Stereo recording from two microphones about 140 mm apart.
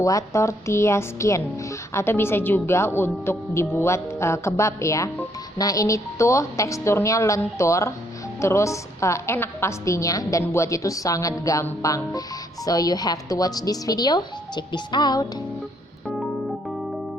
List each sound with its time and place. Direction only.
0.0 s a woman's voice: 25° left (ahead or behind)
16.0 s keyboard: centre (ahead or behind)